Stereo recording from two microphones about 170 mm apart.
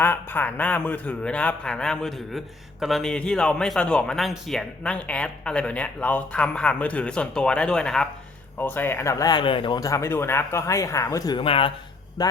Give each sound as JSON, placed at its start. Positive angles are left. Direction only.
{"t": 0.0, "sound": "a man's voice", "side_deg": 10}